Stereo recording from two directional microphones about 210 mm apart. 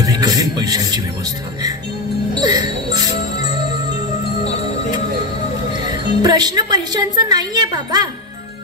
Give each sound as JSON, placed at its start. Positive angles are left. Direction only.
{"t": 0.0, "sound": "music", "side_deg": -20}
{"t": 2.4, "sound": "music", "side_deg": -20}
{"t": 5.9, "sound": "a woman's voice", "side_deg": -20}